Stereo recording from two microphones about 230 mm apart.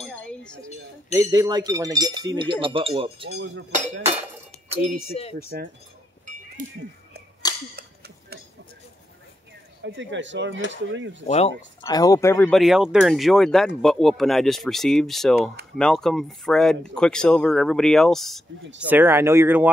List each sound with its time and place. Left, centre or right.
0.0 s a sound: centre
1.1 s speech: centre
3.3 s speech: right
5.2 s speech: left
5.5 s speech: right
7.5 s a sound: centre
9.9 s speech: right
11.2 s speech: left
11.8 s speech: centre
18.9 s speech: centre